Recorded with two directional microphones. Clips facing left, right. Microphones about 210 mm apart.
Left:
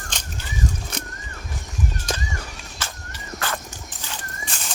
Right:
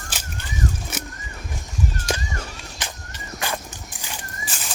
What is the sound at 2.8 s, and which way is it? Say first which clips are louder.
Walk: even; 15° right (ahead or behind).